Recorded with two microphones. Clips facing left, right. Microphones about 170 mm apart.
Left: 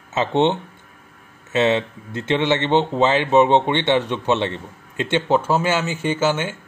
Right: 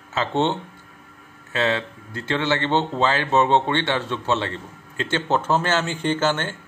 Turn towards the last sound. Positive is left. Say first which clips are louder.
# left 2 dB
turn(degrees=10)  # may be behind; listen again after turning